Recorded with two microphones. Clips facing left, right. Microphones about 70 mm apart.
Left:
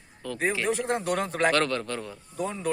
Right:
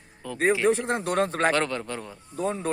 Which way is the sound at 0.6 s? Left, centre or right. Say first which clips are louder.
Right 3 dB; right.